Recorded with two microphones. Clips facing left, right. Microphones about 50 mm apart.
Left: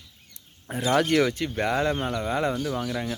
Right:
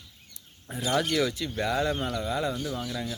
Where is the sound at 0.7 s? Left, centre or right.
Left.